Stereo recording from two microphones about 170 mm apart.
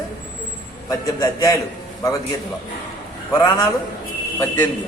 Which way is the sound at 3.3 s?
20° left (ahead or behind).